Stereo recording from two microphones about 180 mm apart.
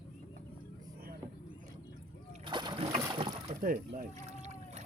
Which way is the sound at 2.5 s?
25° right (ahead or behind).